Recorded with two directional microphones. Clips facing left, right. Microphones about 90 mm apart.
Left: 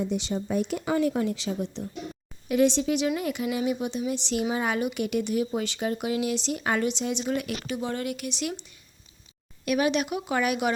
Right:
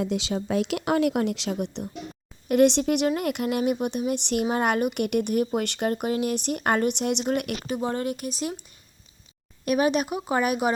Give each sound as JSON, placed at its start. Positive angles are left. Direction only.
{"t": 0.0, "sound": "speech", "side_deg": -90}
{"t": 7.7, "sound": "speech", "side_deg": -40}
{"t": 9.6, "sound": "speech", "side_deg": -40}